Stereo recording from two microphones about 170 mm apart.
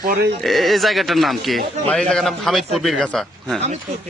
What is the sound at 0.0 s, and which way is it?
Speech, 55° right (ahead or behind).